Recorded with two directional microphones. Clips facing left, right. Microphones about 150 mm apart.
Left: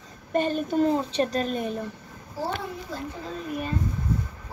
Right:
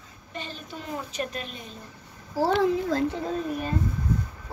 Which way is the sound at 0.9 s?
30° left (ahead or behind).